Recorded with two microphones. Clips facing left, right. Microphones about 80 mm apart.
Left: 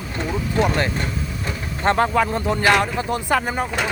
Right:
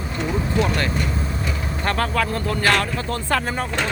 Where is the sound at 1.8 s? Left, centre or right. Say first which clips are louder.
Left 5 dB; left.